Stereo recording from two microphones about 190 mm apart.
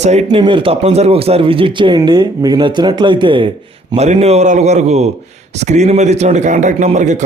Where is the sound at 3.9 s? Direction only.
35° right (ahead or behind).